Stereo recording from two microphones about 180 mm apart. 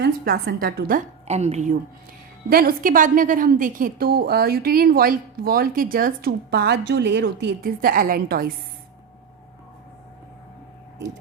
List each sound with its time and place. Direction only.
0.0 s a woman's voice: 65° right (ahead or behind)
1.3 s speech: 35° right (ahead or behind)
2.5 s a woman's voice: 55° right (ahead or behind); by 7.5 s 80° right
7.6 s a woman's voice: 55° right (ahead or behind)